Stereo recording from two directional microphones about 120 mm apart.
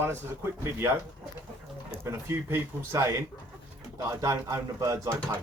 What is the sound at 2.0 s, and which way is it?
Speech, 25° right (ahead or behind).